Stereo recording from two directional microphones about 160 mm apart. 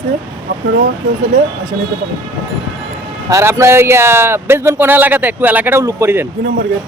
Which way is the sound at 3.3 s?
20° right (ahead or behind).